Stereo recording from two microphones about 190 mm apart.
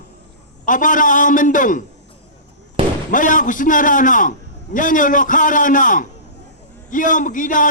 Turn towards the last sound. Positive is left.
turn(degrees=45)  # may be behind; listen again after turning